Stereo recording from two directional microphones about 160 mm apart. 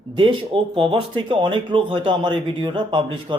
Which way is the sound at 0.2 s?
35° right (ahead or behind).